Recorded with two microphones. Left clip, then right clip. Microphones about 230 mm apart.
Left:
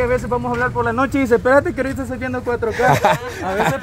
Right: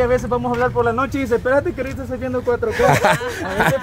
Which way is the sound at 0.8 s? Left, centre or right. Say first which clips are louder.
Even; centre.